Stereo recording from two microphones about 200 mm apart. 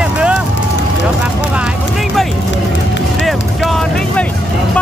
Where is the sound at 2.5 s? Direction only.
65° left (ahead or behind).